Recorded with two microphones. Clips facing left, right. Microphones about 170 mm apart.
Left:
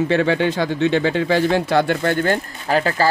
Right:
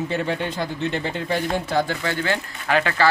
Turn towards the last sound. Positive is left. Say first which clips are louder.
# left 2 dB
turn(degrees=35)  # may be behind; listen again after turning